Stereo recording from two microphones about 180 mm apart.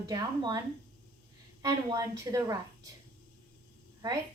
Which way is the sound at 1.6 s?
20° right (ahead or behind).